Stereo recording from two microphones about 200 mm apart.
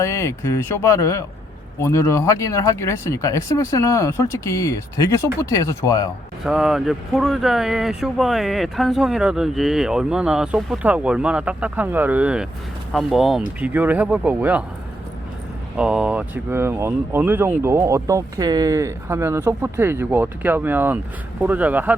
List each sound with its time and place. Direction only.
0.0 s speech: 15° left (ahead or behind)
6.4 s speech: 5° right (ahead or behind)
15.8 s speech: 5° right (ahead or behind)